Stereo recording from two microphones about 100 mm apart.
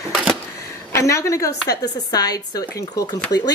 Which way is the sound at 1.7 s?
40° left (ahead or behind).